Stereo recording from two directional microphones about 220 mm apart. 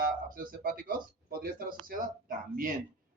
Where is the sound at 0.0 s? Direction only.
40° right (ahead or behind).